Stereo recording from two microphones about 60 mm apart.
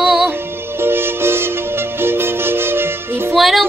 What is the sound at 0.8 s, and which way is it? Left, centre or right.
Music, right.